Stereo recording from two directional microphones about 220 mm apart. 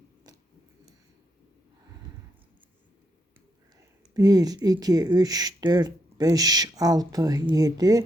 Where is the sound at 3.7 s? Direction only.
15° right (ahead or behind).